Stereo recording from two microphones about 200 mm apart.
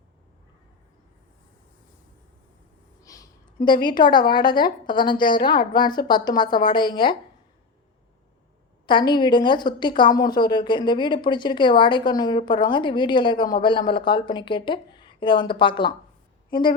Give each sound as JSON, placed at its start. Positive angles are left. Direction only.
{"t": 3.0, "sound": "a sound", "side_deg": 15}
{"t": 4.3, "sound": "a woman's voice", "side_deg": 20}
{"t": 8.9, "sound": "a woman's voice", "side_deg": 25}